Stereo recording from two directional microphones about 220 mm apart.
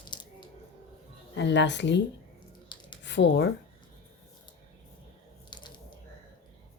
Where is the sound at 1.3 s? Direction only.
55° left (ahead or behind).